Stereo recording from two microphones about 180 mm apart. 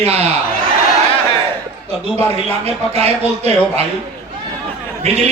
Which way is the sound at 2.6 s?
35° right (ahead or behind).